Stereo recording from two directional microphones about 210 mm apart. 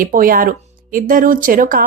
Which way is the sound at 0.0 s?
40° right (ahead or behind).